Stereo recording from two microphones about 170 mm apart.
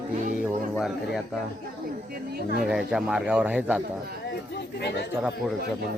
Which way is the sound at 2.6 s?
5° right (ahead or behind).